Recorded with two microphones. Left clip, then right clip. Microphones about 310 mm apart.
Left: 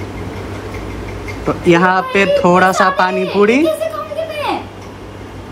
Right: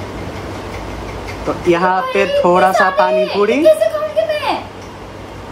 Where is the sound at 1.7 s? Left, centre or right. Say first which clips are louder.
Left 2 dB; left.